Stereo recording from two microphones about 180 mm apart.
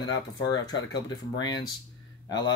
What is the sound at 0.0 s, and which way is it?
Speech, 20° left (ahead or behind).